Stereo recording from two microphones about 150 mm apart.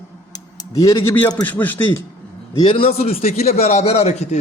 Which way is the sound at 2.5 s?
35° left (ahead or behind).